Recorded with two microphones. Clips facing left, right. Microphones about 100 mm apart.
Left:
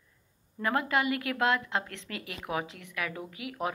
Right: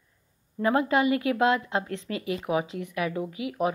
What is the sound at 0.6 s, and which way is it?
A woman's voice, 25° right (ahead or behind).